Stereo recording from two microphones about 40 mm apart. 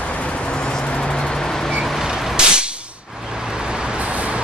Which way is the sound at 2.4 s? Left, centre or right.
Centre.